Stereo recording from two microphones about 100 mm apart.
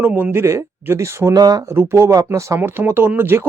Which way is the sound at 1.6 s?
25° right (ahead or behind).